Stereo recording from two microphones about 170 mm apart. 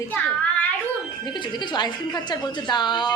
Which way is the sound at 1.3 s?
25° left (ahead or behind).